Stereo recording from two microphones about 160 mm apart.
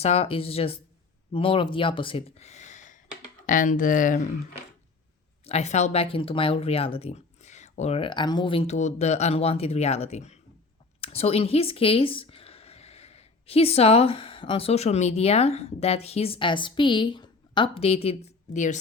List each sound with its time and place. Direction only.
0.0 s speech: 40° left (ahead or behind); by 4.3 s 55° left (ahead or behind)
5.5 s speech: 45° left (ahead or behind)
18.5 s speech: 50° left (ahead or behind)